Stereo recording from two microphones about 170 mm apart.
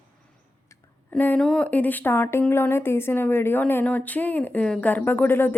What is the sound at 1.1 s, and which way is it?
Speech, 5° left (ahead or behind).